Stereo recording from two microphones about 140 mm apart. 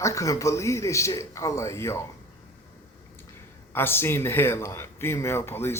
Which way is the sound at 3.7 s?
15° left (ahead or behind).